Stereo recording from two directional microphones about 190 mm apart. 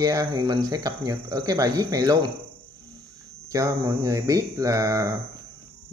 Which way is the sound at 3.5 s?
15° right (ahead or behind).